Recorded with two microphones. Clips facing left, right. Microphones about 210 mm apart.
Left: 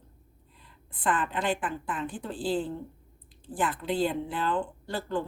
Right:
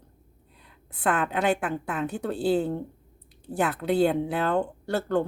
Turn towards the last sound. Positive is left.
turn(degrees=-70)  # may be behind; listen again after turning